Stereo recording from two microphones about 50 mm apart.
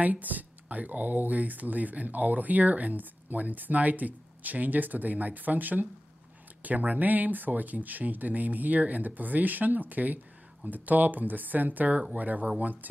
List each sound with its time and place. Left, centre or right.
0.0 s speech: right